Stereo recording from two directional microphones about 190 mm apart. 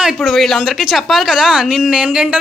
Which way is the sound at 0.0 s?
Centre (ahead or behind).